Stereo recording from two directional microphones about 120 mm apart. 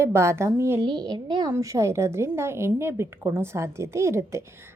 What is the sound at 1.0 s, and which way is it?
Speech, 35° right (ahead or behind).